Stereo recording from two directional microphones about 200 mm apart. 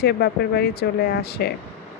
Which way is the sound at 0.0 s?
55° left (ahead or behind).